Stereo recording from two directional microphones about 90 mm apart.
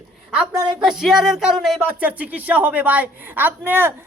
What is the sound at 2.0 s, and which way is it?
A woman's voice, 15° right (ahead or behind).